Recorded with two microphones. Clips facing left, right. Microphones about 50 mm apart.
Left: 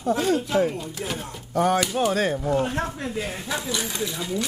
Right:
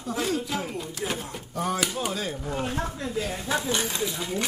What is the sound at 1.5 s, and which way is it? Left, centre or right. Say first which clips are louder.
Speech: left 7 dB; left.